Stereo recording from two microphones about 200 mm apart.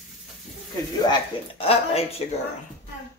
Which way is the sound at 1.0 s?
25° left (ahead or behind).